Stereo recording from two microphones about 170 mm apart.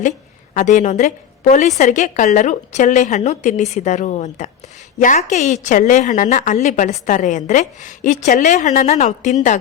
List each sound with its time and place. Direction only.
0.5 s a woman's voice: 45° left (ahead or behind)